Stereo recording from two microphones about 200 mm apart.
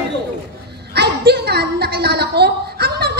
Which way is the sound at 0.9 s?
55° right (ahead or behind).